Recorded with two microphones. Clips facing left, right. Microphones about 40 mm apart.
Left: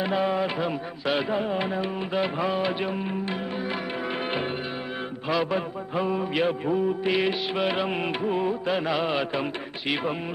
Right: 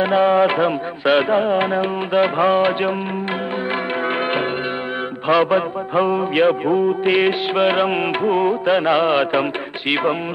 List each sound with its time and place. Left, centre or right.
0.0 s music: right
5.3 s music: right